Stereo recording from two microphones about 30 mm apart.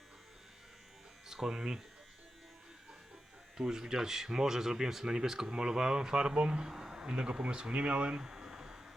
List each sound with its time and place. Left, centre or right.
1.3 s hum: centre
3.6 s speech: right
7.1 s speech: right
8.2 s a sound: centre